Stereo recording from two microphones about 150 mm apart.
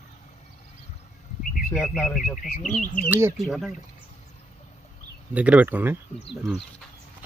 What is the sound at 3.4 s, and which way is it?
Speech, centre (ahead or behind).